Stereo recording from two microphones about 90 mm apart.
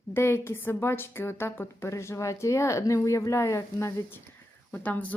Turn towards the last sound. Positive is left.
turn(degrees=15)  # may be behind; listen again after turning